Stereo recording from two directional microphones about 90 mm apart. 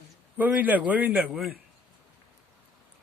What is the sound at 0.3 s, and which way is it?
A man's voice, 20° right (ahead or behind).